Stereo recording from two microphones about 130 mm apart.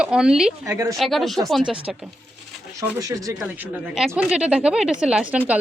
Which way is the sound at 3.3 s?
10° right (ahead or behind).